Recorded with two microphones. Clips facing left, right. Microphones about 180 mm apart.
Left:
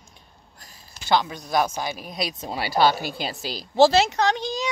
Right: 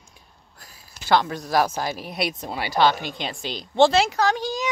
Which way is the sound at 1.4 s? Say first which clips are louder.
Right 2 dB; 5° right (ahead or behind).